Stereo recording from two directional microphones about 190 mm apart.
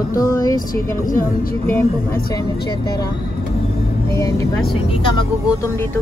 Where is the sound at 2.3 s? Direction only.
20° left (ahead or behind).